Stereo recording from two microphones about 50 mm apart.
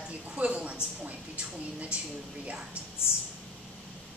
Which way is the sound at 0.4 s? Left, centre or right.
Right.